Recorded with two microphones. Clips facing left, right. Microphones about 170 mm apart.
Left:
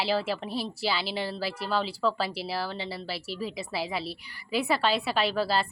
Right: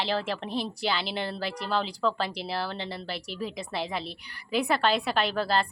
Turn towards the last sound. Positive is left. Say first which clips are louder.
# even
turn(degrees=5)  # may be behind; listen again after turning